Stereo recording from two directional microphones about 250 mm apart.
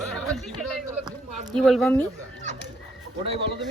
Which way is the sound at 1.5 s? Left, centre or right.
Centre.